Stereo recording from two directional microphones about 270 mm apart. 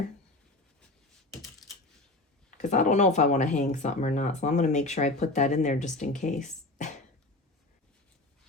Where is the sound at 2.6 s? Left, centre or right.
Left.